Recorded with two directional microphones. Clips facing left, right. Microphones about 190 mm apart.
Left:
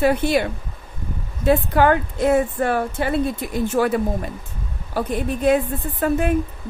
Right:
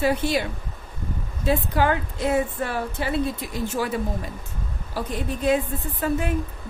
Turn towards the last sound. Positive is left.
turn(degrees=55)  # may be behind; listen again after turning